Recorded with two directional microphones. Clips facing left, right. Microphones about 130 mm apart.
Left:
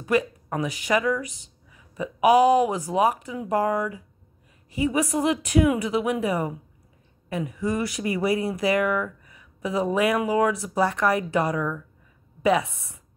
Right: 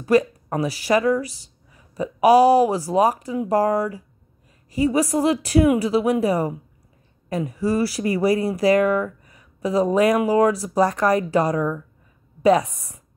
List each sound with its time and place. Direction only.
0.0 s speech: 35° right (ahead or behind)